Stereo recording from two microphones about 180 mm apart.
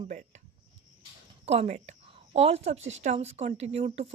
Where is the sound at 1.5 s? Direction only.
40° right (ahead or behind).